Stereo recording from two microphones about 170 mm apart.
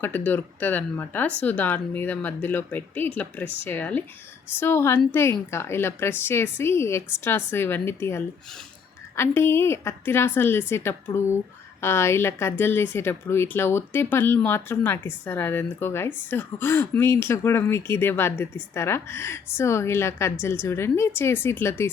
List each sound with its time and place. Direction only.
0.0 s speech: 10° left (ahead or behind)